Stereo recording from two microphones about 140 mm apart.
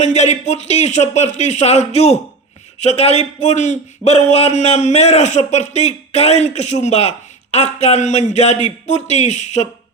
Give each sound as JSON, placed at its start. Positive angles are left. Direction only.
{"t": 0.0, "sound": "a man's voice", "side_deg": 55}